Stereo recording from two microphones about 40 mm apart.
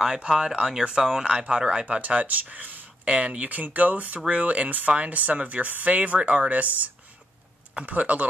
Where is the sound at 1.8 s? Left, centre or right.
Right.